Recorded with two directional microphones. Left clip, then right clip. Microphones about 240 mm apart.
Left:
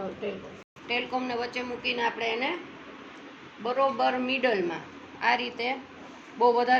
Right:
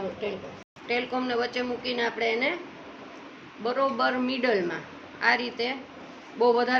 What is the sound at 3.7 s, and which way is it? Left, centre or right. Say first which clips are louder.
A woman's voice: left 1 dB; right.